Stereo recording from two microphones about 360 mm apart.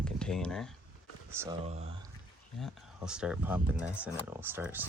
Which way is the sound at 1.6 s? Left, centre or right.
Centre.